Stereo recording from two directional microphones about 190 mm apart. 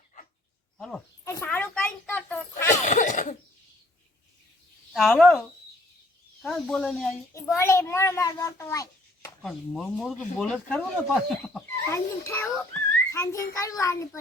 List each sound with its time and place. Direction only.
0.8 s speech: 5° left (ahead or behind)
1.2 s a sound: 10° left (ahead or behind)
2.8 s cough: 40° left (ahead or behind)
4.9 s speech: centre (ahead or behind)
7.5 s a child's voice: 15° left (ahead or behind)
9.4 s speech: centre (ahead or behind)
11.9 s a child's voice: 15° left (ahead or behind)